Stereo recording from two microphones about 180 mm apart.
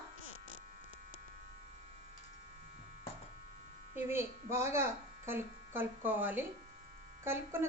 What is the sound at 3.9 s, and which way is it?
A woman's voice, 15° right (ahead or behind).